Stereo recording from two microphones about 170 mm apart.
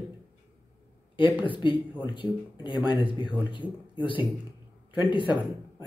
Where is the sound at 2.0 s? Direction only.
30° left (ahead or behind).